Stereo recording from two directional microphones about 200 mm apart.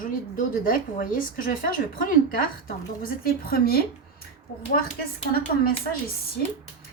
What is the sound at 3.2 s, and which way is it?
Speech, 45° left (ahead or behind).